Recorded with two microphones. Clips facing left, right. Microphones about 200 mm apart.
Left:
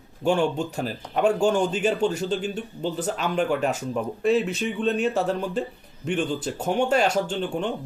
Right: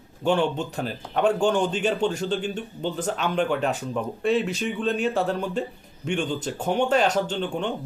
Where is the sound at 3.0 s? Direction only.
Centre (ahead or behind).